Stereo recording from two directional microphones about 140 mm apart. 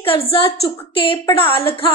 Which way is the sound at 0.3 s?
40° left (ahead or behind).